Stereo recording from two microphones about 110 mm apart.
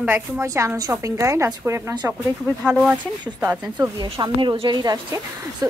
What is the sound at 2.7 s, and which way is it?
A woman's voice, 10° right (ahead or behind).